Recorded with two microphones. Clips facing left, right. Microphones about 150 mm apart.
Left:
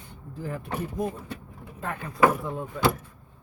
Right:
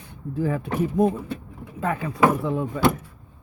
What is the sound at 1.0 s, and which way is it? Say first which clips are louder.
Speech: right 10 dB; 65° right (ahead or behind).